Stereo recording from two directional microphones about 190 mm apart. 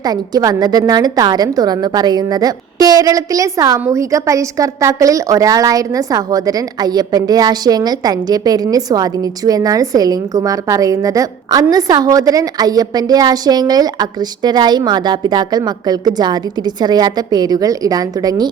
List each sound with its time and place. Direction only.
0.0 s a woman's voice: 20° right (ahead or behind)